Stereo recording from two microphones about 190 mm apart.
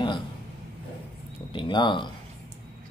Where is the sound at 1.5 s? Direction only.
25° left (ahead or behind).